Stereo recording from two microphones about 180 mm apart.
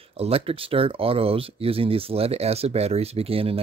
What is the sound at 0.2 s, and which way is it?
Speech, 30° right (ahead or behind).